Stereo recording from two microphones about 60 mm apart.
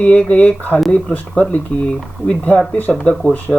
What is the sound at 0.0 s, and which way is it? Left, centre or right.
Speech, left.